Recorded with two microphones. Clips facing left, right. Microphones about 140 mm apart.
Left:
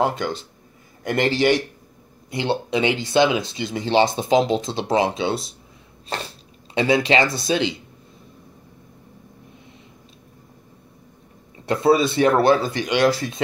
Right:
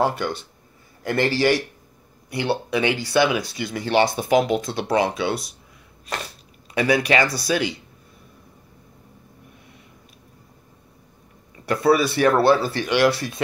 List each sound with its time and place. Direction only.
0.0 s speech: 20° left (ahead or behind)
11.5 s speech: 25° left (ahead or behind)